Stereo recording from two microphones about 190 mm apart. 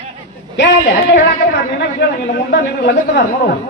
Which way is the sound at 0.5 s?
70° left (ahead or behind).